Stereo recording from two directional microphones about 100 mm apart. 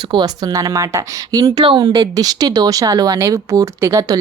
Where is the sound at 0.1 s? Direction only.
45° right (ahead or behind).